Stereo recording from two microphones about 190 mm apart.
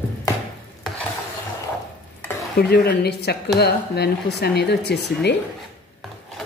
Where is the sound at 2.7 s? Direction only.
55° left (ahead or behind).